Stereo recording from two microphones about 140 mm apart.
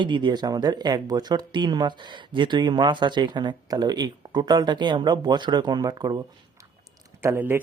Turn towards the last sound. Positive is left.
turn(degrees=-15)  # may be behind; listen again after turning